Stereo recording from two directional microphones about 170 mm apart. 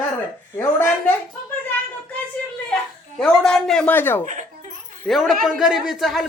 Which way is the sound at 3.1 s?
5° left (ahead or behind).